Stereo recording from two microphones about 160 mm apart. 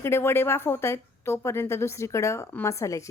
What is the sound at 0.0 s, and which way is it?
Speech, 15° left (ahead or behind).